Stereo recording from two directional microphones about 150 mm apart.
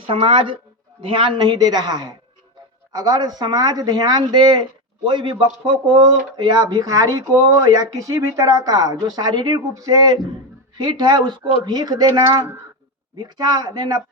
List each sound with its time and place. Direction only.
0.1 s a man's voice: 35° right (ahead or behind)